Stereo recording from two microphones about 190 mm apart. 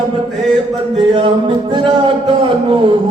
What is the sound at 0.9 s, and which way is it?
Speech, 25° right (ahead or behind).